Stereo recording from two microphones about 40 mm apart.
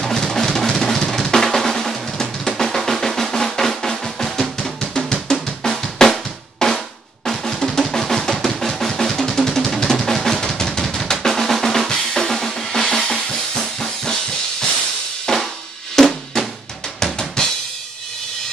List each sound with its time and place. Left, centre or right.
0.3 s drum: centre
11.9 s drum kit: centre
15.3 s drum: centre
17.0 s drum kit: centre